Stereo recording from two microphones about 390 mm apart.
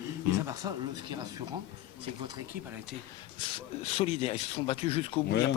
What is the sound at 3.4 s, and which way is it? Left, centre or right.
Speech, centre.